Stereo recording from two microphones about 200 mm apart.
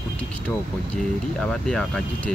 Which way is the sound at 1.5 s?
5° left (ahead or behind).